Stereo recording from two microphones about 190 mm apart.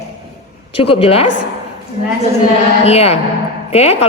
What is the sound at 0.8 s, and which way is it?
Speech, 30° left (ahead or behind).